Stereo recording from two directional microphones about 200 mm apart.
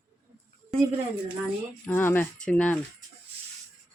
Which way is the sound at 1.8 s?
10° left (ahead or behind).